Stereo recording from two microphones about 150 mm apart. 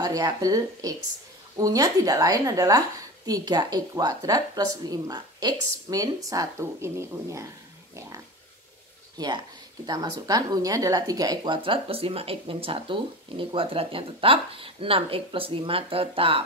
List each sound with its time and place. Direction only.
0.0 s a woman's voice: 25° right (ahead or behind)
9.2 s a woman's voice: 25° right (ahead or behind)